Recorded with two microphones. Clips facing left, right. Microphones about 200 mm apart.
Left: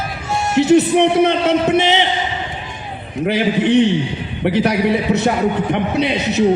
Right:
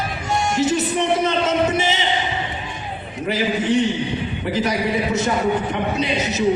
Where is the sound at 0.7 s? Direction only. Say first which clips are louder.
Left 8 dB; 60° left (ahead or behind).